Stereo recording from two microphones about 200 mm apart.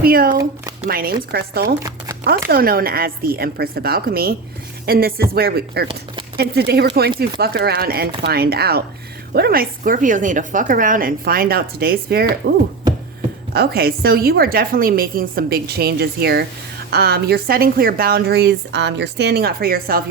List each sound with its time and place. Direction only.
0.0 s a woman's voice: 45° right (ahead or behind)